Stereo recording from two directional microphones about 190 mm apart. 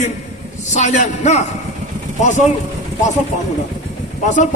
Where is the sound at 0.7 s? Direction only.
40° left (ahead or behind).